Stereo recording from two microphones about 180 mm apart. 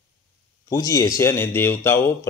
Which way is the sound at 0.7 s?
20° left (ahead or behind).